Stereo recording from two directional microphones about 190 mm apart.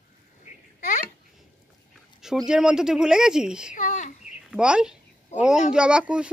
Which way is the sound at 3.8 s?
40° left (ahead or behind).